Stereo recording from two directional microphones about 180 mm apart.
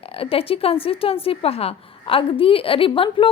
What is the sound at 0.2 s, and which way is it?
A woman's voice, 30° left (ahead or behind).